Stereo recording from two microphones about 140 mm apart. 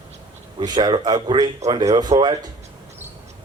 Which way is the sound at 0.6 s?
30° right (ahead or behind).